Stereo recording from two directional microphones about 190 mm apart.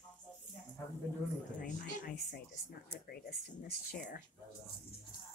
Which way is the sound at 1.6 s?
55° left (ahead or behind).